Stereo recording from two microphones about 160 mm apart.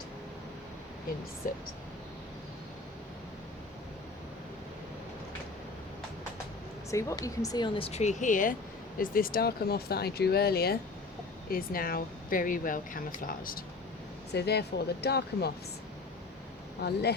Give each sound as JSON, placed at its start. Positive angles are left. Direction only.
{"t": 1.4, "sound": "speech", "side_deg": 60}
{"t": 6.9, "sound": "speech", "side_deg": 20}
{"t": 7.9, "sound": "speech", "side_deg": 45}
{"t": 11.5, "sound": "speech", "side_deg": 65}
{"t": 14.3, "sound": "speech", "side_deg": 90}
{"t": 16.8, "sound": "speech", "side_deg": 90}